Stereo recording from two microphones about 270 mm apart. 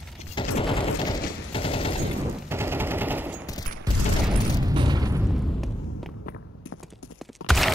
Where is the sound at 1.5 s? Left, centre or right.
Left.